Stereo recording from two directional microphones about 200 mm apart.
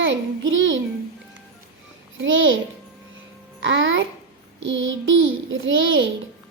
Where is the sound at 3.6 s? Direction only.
65° right (ahead or behind).